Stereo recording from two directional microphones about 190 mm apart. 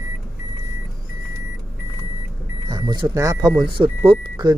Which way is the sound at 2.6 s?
20° right (ahead or behind).